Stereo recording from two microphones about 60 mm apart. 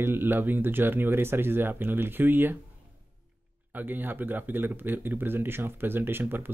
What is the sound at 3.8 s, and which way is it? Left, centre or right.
Speech, right.